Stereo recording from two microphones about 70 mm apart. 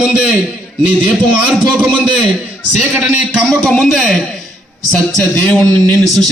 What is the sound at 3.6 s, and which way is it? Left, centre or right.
Speech, centre.